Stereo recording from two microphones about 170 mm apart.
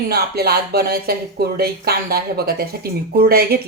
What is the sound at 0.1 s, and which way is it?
Speech, 65° right (ahead or behind).